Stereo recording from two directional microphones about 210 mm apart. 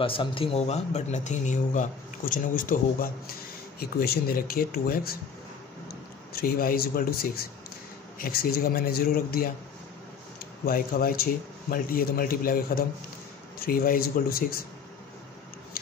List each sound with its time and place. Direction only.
0.0 s a man's voice: 25° left (ahead or behind); by 9.5 s 45° left (ahead or behind)
10.6 s a man's voice: 45° left (ahead or behind)